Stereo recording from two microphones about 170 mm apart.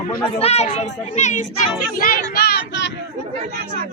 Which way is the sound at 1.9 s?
55° left (ahead or behind).